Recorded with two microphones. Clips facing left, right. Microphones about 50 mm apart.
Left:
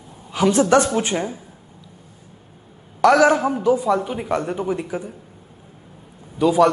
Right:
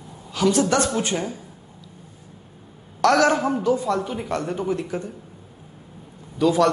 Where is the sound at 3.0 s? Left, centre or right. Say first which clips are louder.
Left 3 dB; centre.